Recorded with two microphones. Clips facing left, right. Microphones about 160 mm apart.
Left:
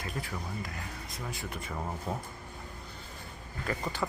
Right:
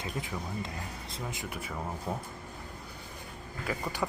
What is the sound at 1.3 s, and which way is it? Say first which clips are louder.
Speech: left 2 dB; 15° right (ahead or behind).